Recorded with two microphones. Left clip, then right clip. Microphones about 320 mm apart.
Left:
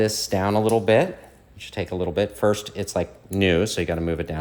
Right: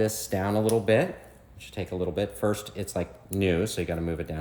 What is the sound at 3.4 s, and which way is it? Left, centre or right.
Speech, centre.